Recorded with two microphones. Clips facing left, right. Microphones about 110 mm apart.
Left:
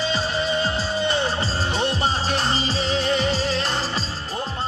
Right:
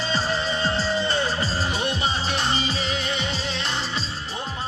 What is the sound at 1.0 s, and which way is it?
Music, 20° left (ahead or behind).